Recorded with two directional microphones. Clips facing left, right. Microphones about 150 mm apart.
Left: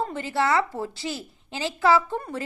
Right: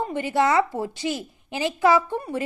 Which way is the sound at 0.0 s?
15° right (ahead or behind).